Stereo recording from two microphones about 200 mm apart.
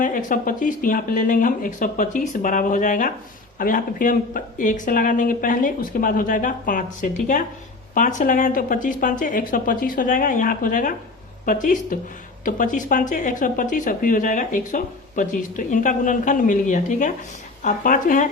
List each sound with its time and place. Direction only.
0.0 s speech: 40° left (ahead or behind)